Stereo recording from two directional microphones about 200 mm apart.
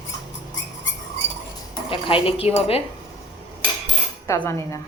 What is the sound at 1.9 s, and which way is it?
Speech, 25° left (ahead or behind).